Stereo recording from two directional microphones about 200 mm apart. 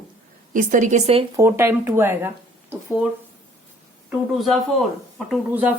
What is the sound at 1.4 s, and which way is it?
Speech, 10° right (ahead or behind).